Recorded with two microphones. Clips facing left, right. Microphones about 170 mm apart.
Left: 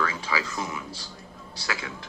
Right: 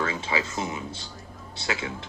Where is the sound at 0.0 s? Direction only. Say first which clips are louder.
Right 1 dB; 25° right (ahead or behind).